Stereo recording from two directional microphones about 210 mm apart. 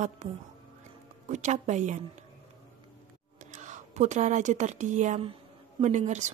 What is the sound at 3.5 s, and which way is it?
A woman's voice, 35° right (ahead or behind).